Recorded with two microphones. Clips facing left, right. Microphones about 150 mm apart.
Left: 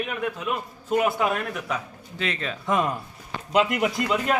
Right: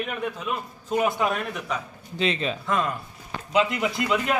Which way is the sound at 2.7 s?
20° left (ahead or behind).